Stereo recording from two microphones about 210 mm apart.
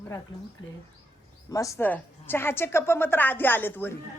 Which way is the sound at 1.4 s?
15° left (ahead or behind).